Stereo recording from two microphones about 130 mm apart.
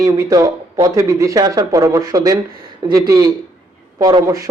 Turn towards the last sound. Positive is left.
turn(degrees=-25)  # may be behind; listen again after turning